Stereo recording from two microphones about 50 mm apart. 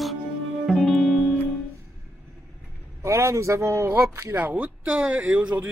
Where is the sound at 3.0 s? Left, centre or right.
Right.